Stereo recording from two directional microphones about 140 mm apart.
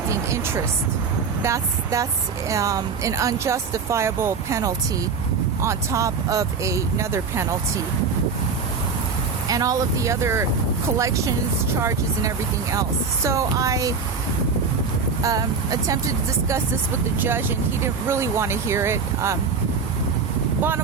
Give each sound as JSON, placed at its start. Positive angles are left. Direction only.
{"t": 0.1, "sound": "a sound", "side_deg": -20}
{"t": 1.4, "sound": "speech", "side_deg": -20}
{"t": 9.5, "sound": "speech", "side_deg": -25}
{"t": 15.2, "sound": "speech", "side_deg": -25}